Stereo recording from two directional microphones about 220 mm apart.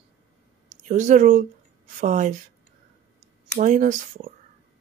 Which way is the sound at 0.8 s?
35° right (ahead or behind).